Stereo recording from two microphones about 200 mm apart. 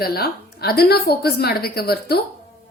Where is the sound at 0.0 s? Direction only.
50° left (ahead or behind).